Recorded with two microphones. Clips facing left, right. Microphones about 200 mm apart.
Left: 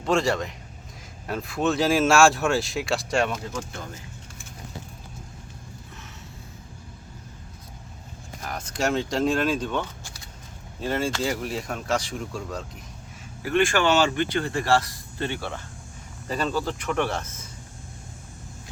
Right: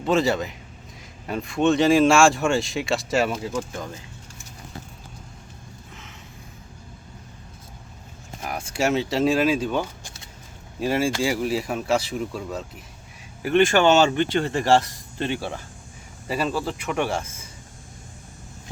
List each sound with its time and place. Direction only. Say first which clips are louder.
0.0 s speech: right 2 dB; centre (ahead or behind)
8.4 s speech: right 3 dB; 10° right (ahead or behind)
10.0 s a sound: even; 20° right (ahead or behind)
10.8 s speech: right 4 dB; 10° right (ahead or behind)
13.4 s speech: right 4 dB; 20° right (ahead or behind)